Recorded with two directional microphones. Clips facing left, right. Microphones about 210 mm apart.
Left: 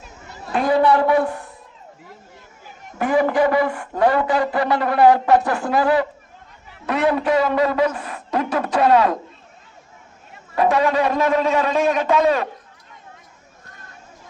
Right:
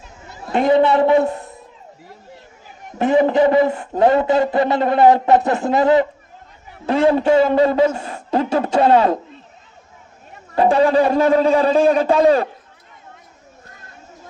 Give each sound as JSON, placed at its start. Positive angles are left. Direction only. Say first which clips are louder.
{"t": 0.5, "sound": "a man's voice", "louder": "right 3 dB", "side_deg": -25}
{"t": 3.0, "sound": "a man's voice", "louder": "right 3 dB", "side_deg": -25}
{"t": 10.5, "sound": "a man's voice", "louder": "right 4 dB", "side_deg": -30}